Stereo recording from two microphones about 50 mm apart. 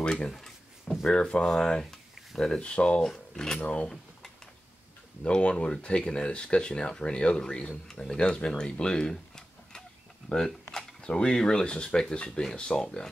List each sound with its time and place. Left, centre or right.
0.0 s speech: centre
3.5 s speech: left
5.2 s speech: centre
11.0 s speech: centre